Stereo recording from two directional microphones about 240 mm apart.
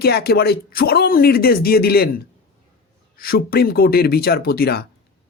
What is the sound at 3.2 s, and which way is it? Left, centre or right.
Speech, left.